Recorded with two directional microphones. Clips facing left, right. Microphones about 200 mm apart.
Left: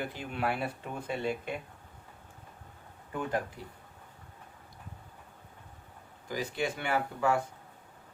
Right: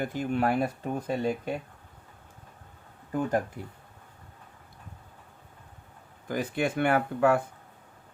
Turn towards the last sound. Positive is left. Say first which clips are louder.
# right 6 dB
turn(degrees=-55)  # may be behind; listen again after turning